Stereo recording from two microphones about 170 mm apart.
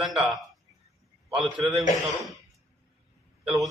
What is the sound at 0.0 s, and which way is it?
Speech, centre (ahead or behind).